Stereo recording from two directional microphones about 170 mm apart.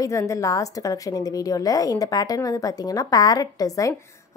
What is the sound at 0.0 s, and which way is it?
A woman's voice, 20° left (ahead or behind).